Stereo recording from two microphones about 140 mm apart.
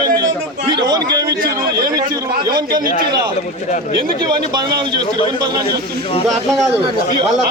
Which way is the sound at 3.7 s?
60° left (ahead or behind).